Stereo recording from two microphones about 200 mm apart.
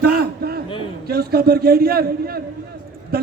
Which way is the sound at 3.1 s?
50° right (ahead or behind).